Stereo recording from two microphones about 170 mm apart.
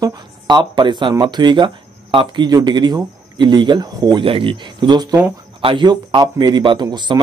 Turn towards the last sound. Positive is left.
turn(degrees=-25)  # may be behind; listen again after turning